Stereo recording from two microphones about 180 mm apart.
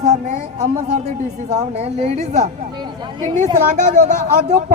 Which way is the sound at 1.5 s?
35° right (ahead or behind).